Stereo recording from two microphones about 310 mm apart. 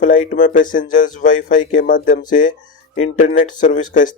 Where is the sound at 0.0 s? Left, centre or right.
Left.